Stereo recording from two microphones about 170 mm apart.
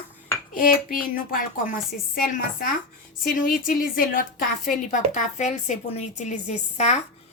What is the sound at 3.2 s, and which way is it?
A woman's voice, 55° left (ahead or behind).